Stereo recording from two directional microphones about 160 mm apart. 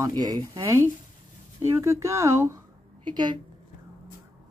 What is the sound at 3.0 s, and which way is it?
Speech, 30° right (ahead or behind).